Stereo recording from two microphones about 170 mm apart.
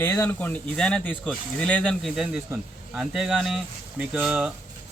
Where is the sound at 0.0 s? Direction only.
10° left (ahead or behind).